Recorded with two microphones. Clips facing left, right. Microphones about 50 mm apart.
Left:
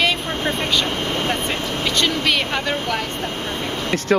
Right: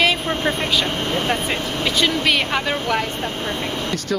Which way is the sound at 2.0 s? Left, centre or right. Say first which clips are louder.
Right 1 dB; centre.